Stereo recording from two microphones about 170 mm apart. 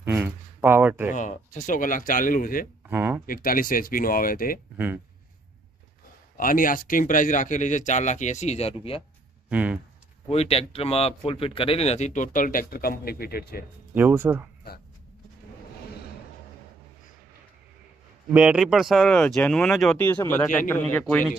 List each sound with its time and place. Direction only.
0.0 s a sound: 10° right (ahead or behind)
1.1 s speech: 45° left (ahead or behind)
2.9 s speech: 15° right (ahead or behind)
3.3 s speech: 55° left (ahead or behind)
4.7 s speech: 10° right (ahead or behind)
6.3 s speech: 55° left (ahead or behind); by 9.0 s 35° left (ahead or behind)
9.5 s speech: 10° right (ahead or behind)
10.2 s speech: 35° left (ahead or behind); by 13.7 s 65° left (ahead or behind)
13.9 s speech: 10° right (ahead or behind)
18.3 s a man's voice: 5° right (ahead or behind)